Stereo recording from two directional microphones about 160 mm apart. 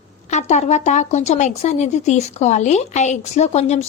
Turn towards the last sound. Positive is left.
turn(degrees=40)  # may be behind; listen again after turning